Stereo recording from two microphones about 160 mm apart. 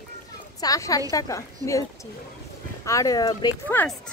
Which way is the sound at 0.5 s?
20° left (ahead or behind).